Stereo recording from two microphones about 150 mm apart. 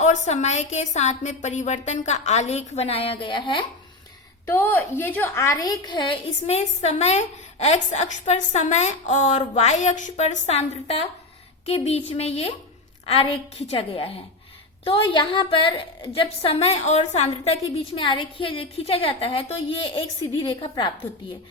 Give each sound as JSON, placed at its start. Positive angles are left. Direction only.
{"t": 0.0, "sound": "a woman's voice", "side_deg": 50}
{"t": 4.4, "sound": "a woman's voice", "side_deg": 15}
{"t": 6.5, "sound": "a woman's voice", "side_deg": 45}